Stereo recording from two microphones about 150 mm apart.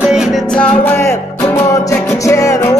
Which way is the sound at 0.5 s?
10° left (ahead or behind).